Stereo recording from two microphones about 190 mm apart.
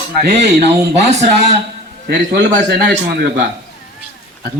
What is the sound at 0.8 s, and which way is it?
A man's voice, 65° right (ahead or behind).